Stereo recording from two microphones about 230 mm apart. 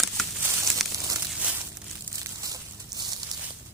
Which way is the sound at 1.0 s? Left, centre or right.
Centre.